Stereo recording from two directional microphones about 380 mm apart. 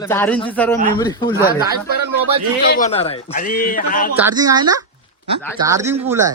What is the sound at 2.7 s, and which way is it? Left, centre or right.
Speech, centre.